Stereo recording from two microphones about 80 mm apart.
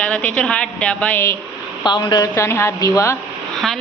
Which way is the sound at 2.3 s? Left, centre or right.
Left.